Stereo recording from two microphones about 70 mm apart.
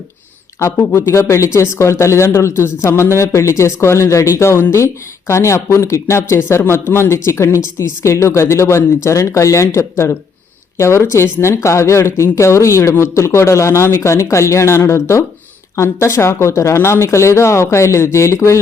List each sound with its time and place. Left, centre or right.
0.6 s speech: left